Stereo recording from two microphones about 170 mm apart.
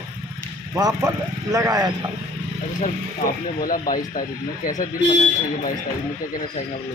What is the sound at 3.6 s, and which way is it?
Speech, 55° left (ahead or behind).